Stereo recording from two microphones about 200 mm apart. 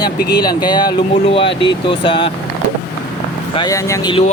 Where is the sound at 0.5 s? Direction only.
20° left (ahead or behind).